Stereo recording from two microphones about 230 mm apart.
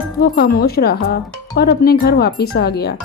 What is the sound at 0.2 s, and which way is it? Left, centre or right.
Speech, left.